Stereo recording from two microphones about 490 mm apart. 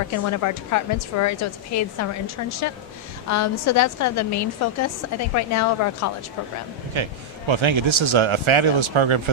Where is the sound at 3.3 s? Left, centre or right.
Left.